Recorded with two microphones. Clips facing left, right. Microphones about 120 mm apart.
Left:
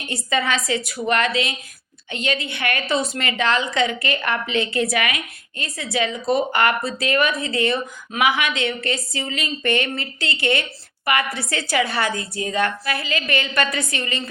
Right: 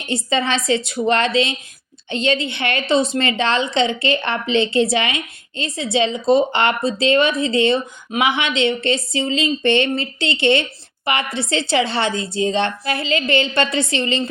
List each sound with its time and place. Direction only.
0.0 s a woman's voice: 25° right (ahead or behind)